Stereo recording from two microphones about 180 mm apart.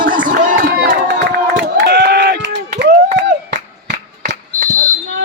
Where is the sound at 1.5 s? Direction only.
70° right (ahead or behind).